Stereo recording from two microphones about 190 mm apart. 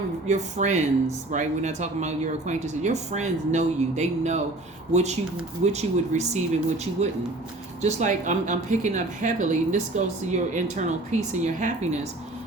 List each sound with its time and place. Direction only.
0.3 s speech: 40° right (ahead or behind)